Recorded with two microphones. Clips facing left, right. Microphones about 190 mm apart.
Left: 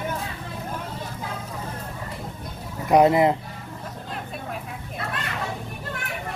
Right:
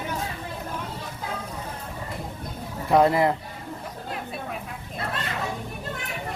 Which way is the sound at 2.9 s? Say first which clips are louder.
Left 2 dB; 20° left (ahead or behind).